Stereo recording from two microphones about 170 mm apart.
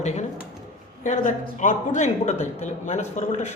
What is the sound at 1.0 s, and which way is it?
A man's voice, 45° left (ahead or behind).